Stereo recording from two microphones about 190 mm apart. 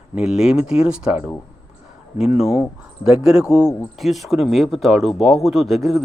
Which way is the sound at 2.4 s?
5° right (ahead or behind).